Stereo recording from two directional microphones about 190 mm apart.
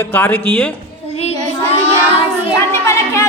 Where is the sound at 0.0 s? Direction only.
10° left (ahead or behind).